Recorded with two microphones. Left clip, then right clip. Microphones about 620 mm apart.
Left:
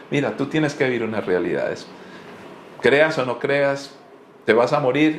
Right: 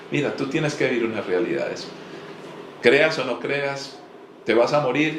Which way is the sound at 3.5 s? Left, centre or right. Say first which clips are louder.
Left 5 dB; left.